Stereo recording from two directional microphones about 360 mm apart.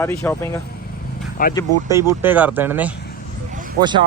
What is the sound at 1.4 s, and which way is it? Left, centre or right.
Speech, left.